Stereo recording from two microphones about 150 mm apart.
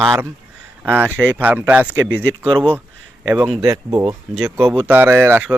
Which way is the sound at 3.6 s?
20° right (ahead or behind).